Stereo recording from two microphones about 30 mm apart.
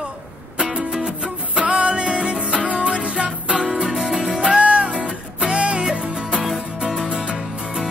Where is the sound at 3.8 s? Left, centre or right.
Centre.